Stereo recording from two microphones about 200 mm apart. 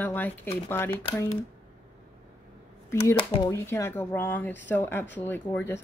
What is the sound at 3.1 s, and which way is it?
Speech, 25° left (ahead or behind).